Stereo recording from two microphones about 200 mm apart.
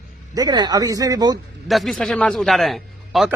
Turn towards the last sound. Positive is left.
turn(degrees=0)  # may be behind; listen again after turning